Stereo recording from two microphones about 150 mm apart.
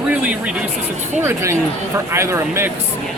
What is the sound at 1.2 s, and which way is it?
Speech, 15° right (ahead or behind).